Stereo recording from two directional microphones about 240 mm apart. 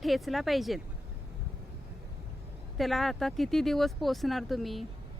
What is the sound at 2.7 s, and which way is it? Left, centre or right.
Speech, centre.